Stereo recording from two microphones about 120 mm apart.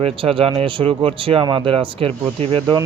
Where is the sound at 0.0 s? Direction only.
50° right (ahead or behind).